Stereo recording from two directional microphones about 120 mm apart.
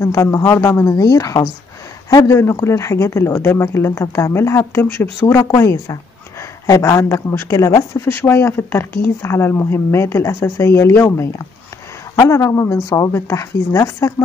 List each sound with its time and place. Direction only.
0.0 s speech: 25° left (ahead or behind)